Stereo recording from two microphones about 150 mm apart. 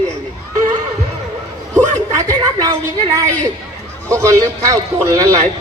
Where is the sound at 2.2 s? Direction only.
20° right (ahead or behind).